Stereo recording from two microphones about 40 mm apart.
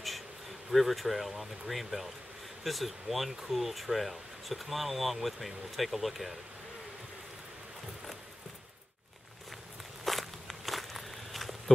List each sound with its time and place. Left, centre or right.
0.7 s speech: centre
10.0 s walk: centre